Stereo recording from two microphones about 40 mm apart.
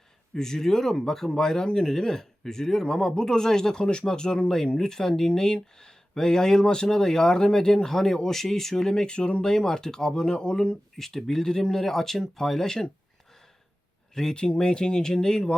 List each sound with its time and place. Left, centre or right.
0.3 s speech: centre
9.1 s speech: left
14.1 s speech: centre